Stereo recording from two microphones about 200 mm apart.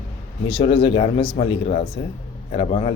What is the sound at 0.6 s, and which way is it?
A man's voice, 30° left (ahead or behind).